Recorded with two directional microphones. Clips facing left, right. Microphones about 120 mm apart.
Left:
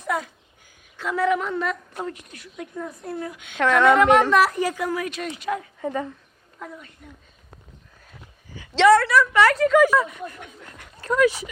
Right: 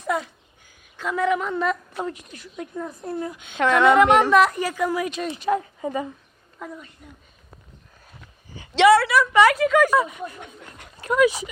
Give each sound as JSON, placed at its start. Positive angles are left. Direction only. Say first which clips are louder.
{"t": 1.0, "sound": "a woman's voice", "louder": "even", "side_deg": 0}
{"t": 2.0, "sound": "a woman's voice", "louder": "right 2 dB", "side_deg": 50}
{"t": 2.4, "sound": "a woman's voice", "louder": "right 1 dB", "side_deg": -30}
{"t": 3.6, "sound": "speech", "louder": "right 1 dB", "side_deg": -10}
{"t": 4.6, "sound": "speech", "louder": "right 1 dB", "side_deg": 15}
{"t": 4.9, "sound": "a woman's voice", "louder": "right 2 dB", "side_deg": -15}
{"t": 5.8, "sound": "speech", "louder": "even", "side_deg": -10}
{"t": 8.9, "sound": "speech", "louder": "left 2 dB", "side_deg": -10}